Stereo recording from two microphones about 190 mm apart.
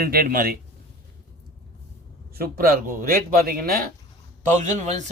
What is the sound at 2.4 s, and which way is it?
Speech, 50° right (ahead or behind).